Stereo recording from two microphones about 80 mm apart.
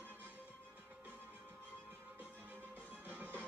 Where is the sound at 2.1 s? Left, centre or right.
Right.